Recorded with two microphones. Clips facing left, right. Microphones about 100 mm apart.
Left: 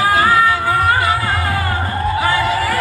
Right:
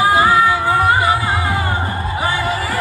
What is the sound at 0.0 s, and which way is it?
Music, 20° right (ahead or behind).